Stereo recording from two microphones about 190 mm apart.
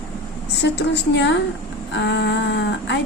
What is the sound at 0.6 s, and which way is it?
Speech, 65° left (ahead or behind).